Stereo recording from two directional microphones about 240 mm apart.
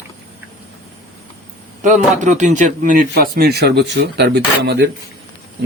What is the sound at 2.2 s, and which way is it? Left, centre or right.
Speech, right.